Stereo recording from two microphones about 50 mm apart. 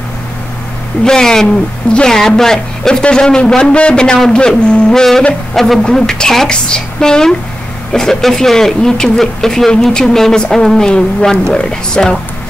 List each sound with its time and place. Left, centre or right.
1.0 s a man's voice: centre
5.5 s a sound: centre
5.9 s speech: centre